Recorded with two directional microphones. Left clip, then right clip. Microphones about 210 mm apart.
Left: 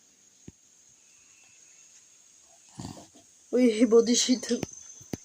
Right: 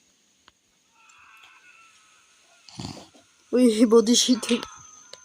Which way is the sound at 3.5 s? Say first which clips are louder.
Right 3 dB; 35° right (ahead or behind).